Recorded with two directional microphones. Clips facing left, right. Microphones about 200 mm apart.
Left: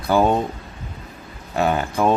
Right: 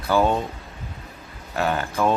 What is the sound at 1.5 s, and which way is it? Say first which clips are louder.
Speech: left 4 dB; 20° left (ahead or behind).